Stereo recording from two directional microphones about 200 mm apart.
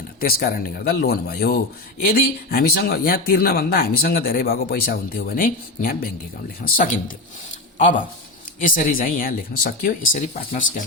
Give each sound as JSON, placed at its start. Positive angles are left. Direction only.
{"t": 0.2, "sound": "speech", "side_deg": 45}